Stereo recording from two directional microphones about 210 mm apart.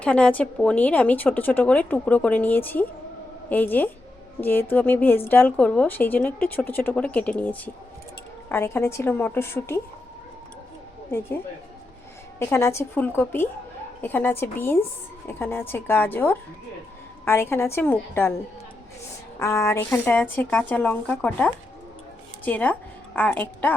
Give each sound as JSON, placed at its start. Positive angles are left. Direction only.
{"t": 0.0, "sound": "a woman's voice", "side_deg": 5}
{"t": 12.4, "sound": "a woman's voice", "side_deg": 10}
{"t": 19.4, "sound": "a woman's voice", "side_deg": 15}